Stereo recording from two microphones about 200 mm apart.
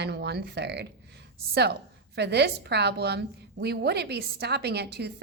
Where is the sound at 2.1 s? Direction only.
55° right (ahead or behind).